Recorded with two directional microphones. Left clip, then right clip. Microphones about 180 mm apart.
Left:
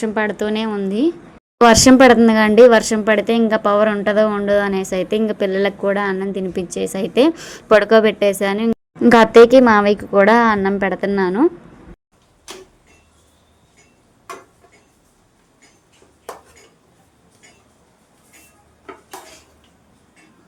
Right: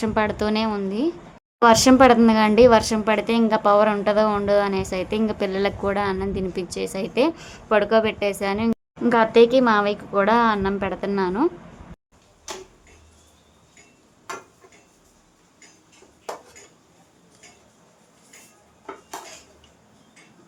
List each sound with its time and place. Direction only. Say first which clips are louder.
0.0 s a woman's voice: left 2 dB; 10° left (ahead or behind)
0.9 s a woman's voice: left 6 dB; 20° left (ahead or behind)
9.0 s a woman's voice: left 7 dB; 35° left (ahead or behind)